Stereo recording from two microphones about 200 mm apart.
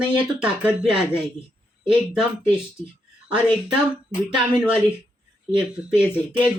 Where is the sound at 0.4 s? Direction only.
5° right (ahead or behind).